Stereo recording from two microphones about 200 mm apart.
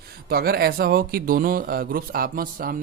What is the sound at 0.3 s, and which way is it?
Speech, 50° right (ahead or behind).